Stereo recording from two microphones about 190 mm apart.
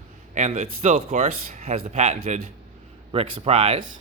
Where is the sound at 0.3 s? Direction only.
40° right (ahead or behind).